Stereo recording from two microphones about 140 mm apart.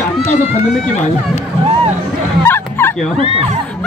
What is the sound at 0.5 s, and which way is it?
Speech, 55° left (ahead or behind).